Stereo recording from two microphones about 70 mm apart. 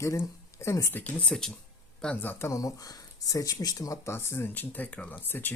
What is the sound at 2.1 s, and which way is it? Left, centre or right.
Speech, left.